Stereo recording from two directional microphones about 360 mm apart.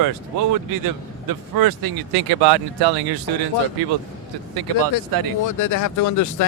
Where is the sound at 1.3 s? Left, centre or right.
Right.